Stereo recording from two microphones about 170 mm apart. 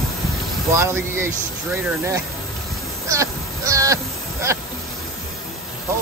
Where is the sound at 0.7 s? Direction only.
15° right (ahead or behind).